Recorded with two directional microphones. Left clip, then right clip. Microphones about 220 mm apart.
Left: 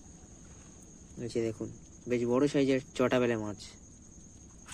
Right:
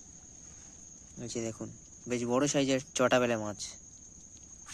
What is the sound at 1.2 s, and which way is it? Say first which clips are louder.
Speech: left 4 dB; 25° right (ahead or behind).